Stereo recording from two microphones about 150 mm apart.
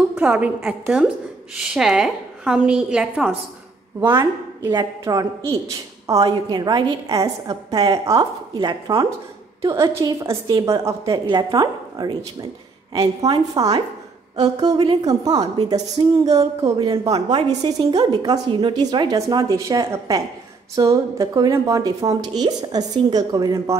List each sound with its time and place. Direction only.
0.1 s a woman's voice: 10° right (ahead or behind)